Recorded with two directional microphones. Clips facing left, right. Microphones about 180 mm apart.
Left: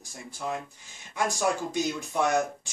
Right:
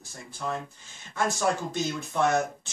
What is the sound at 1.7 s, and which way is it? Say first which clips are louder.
Speech: left 1 dB; 15° left (ahead or behind).